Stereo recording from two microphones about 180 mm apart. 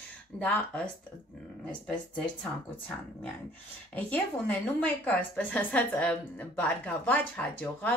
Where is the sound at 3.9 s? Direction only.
10° left (ahead or behind).